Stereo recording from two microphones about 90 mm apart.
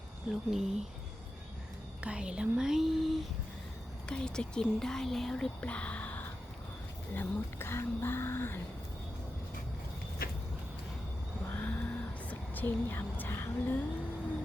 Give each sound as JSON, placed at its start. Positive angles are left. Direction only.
{"t": 0.3, "sound": "speech", "side_deg": 0}
{"t": 2.0, "sound": "speech", "side_deg": -10}
{"t": 11.5, "sound": "vehicle", "side_deg": 20}
{"t": 12.3, "sound": "speech", "side_deg": 20}